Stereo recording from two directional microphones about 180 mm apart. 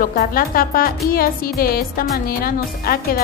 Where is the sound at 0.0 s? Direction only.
55° left (ahead or behind).